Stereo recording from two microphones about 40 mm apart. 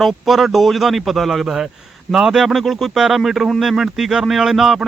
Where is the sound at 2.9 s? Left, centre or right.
Centre.